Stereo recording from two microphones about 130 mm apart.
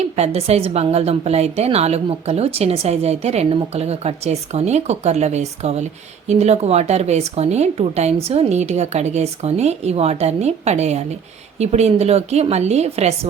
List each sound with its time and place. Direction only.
0.0 s a woman's voice: 55° right (ahead or behind)